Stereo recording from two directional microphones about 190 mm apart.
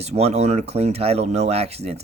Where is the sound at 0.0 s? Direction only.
35° right (ahead or behind).